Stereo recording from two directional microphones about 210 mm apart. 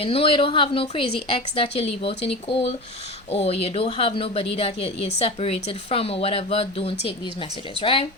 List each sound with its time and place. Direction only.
0.0 s speech: 25° left (ahead or behind)